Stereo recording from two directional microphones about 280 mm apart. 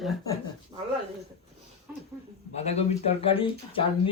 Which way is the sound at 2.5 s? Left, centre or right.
Left.